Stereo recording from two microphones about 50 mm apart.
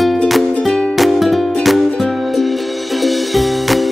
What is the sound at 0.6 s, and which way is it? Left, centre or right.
Music, centre.